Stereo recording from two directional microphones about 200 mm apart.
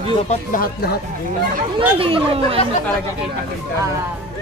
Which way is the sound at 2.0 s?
30° right (ahead or behind).